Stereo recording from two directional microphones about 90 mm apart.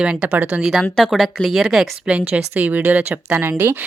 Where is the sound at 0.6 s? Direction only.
5° right (ahead or behind).